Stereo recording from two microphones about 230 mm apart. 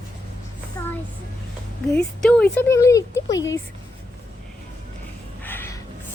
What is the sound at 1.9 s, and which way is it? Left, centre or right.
Speech, centre.